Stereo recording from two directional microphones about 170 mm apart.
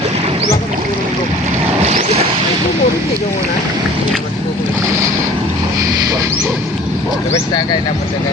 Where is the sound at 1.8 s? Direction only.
35° right (ahead or behind).